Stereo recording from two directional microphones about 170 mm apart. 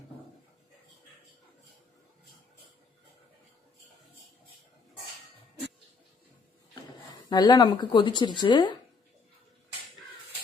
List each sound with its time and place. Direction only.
7.3 s speech: 25° left (ahead or behind)